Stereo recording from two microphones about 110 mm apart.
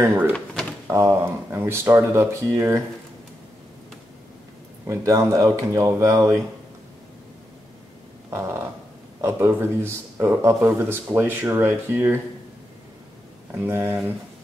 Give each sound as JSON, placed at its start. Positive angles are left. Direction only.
{"t": 0.0, "sound": "speech", "side_deg": -20}
{"t": 4.8, "sound": "speech", "side_deg": -30}
{"t": 8.3, "sound": "a sound", "side_deg": -20}
{"t": 9.2, "sound": "speech", "side_deg": -25}
{"t": 13.5, "sound": "speech", "side_deg": -20}